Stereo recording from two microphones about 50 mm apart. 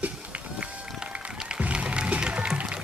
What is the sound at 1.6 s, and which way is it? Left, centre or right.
Music, right.